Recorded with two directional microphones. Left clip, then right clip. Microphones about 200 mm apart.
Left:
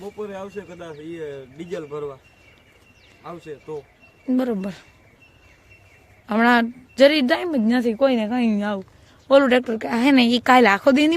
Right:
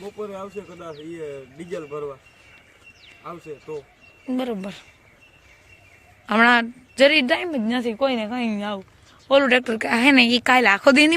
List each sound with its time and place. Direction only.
0.0 s speech: 5° left (ahead or behind)
3.2 s speech: 5° right (ahead or behind)
4.3 s speech: 25° left (ahead or behind)
6.2 s speech: 5° left (ahead or behind); by 8.8 s 30° left (ahead or behind)
9.2 s speech: 20° left (ahead or behind)
9.6 s speech: 5° left (ahead or behind)